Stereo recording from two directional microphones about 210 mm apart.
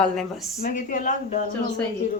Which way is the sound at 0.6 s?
40° left (ahead or behind).